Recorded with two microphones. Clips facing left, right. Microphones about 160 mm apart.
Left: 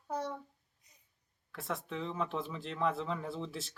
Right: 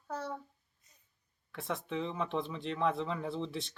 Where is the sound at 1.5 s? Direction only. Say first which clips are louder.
Right 2 dB; centre (ahead or behind).